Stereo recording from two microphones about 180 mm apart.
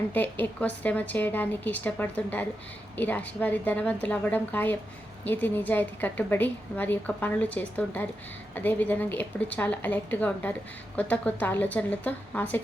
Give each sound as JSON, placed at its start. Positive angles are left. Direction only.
{"t": 0.1, "sound": "a woman's voice", "side_deg": 10}